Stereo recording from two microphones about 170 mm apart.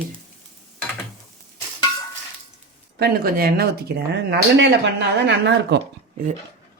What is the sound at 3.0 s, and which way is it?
Speech, 65° right (ahead or behind).